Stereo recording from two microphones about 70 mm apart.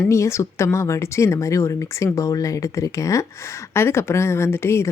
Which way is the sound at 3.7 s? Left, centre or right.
Left.